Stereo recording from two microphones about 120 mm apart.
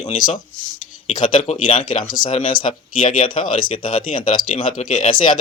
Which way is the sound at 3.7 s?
45° left (ahead or behind).